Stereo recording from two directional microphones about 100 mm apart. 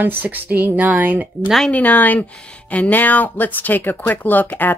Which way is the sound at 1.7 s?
15° left (ahead or behind).